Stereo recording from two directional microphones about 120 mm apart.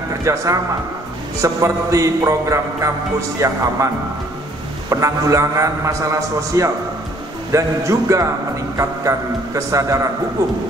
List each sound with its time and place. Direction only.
0.2 s a man's voice: 25° right (ahead or behind)